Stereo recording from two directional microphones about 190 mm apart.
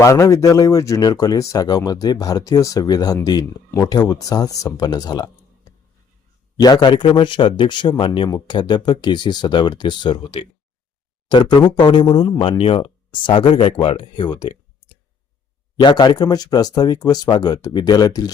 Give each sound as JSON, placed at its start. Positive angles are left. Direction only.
{"t": 0.0, "sound": "speech", "side_deg": 15}
{"t": 6.6, "sound": "speech", "side_deg": 20}
{"t": 15.8, "sound": "speech", "side_deg": 25}